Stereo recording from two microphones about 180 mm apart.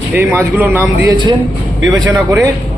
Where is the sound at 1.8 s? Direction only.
90° right.